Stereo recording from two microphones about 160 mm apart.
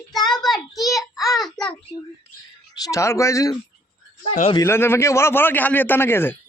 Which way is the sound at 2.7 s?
20° left (ahead or behind).